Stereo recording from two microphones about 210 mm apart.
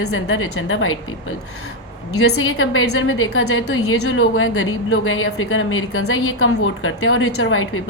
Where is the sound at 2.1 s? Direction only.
85° left.